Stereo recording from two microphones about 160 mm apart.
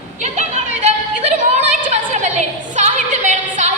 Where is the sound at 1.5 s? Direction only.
45° right (ahead or behind).